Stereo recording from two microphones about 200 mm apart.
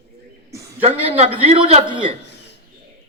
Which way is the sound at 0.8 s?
30° right (ahead or behind).